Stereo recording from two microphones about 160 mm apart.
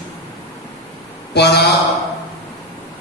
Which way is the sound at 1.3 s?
90° left.